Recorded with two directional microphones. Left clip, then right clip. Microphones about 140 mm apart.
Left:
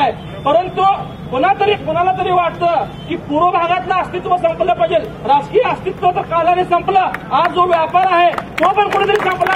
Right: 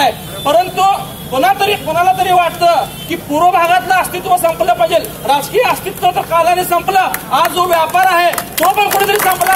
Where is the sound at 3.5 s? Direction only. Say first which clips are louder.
Right 4 dB; 35° right (ahead or behind).